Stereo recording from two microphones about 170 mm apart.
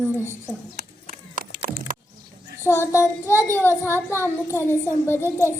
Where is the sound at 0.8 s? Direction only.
60° right (ahead or behind).